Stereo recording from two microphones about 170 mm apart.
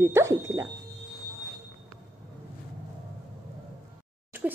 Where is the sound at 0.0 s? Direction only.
15° right (ahead or behind).